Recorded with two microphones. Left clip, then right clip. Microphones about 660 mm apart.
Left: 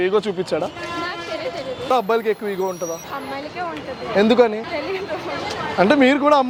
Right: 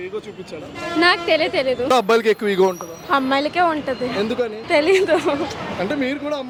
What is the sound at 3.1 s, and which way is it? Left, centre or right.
Speech, right.